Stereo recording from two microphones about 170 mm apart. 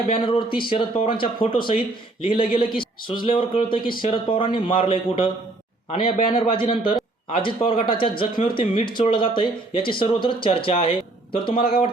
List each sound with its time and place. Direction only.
0.1 s a man's voice: 30° left (ahead or behind)